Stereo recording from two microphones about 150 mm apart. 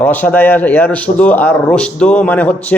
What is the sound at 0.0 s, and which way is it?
A man's voice, 10° left (ahead or behind).